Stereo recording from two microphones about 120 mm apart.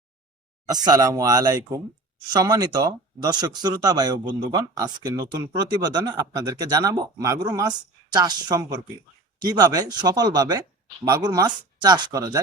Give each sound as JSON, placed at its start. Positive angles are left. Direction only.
{"t": 0.7, "sound": "speech", "side_deg": -35}